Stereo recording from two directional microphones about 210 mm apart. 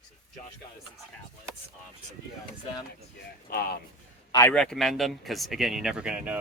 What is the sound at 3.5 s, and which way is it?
Speech, 45° left (ahead or behind).